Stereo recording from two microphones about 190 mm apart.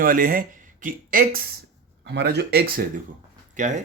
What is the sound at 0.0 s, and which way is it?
Speech, 50° right (ahead or behind).